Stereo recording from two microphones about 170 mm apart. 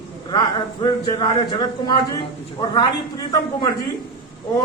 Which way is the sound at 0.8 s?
25° left (ahead or behind).